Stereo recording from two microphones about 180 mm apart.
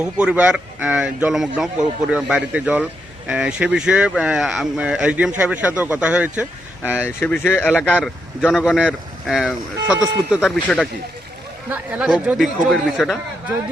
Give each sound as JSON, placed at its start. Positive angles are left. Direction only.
{"t": 0.0, "sound": "speech", "side_deg": -5}
{"t": 7.2, "sound": "speech", "side_deg": 10}
{"t": 7.7, "sound": "speech", "side_deg": 0}